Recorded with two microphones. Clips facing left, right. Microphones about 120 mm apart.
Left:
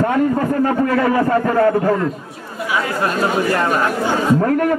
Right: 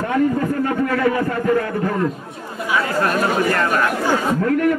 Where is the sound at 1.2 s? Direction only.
45° left (ahead or behind).